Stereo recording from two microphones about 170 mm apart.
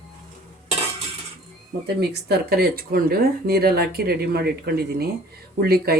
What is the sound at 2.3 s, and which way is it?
Speech, 65° right (ahead or behind).